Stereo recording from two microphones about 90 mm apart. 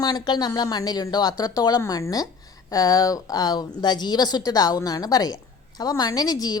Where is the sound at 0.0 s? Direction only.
50° left (ahead or behind).